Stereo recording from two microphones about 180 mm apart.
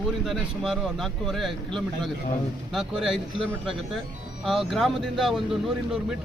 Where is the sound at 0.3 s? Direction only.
Centre (ahead or behind).